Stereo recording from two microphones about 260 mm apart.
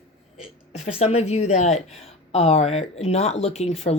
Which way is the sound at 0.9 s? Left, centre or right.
Left.